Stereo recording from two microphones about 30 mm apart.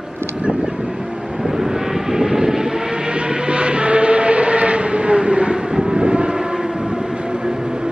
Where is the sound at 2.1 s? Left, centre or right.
Right.